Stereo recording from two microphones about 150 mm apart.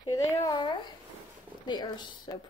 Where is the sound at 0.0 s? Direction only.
25° left (ahead or behind).